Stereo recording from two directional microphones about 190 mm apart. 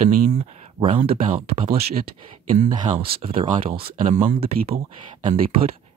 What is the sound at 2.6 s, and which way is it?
Speech, 50° right (ahead or behind).